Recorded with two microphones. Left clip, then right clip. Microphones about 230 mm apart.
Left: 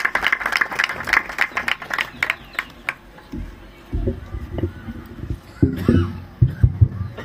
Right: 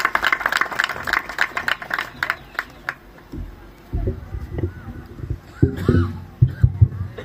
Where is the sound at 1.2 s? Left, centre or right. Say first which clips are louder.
Left 3 dB; left.